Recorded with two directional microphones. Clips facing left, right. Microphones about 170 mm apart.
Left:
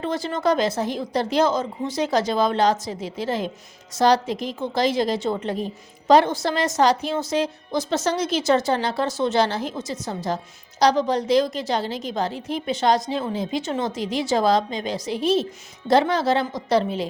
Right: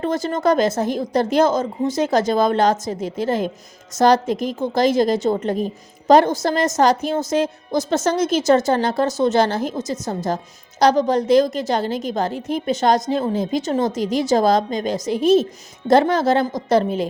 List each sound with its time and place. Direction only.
0.0 s a woman's voice: 45° right (ahead or behind)